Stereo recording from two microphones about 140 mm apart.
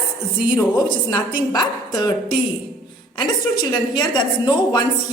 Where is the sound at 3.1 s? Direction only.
35° left (ahead or behind).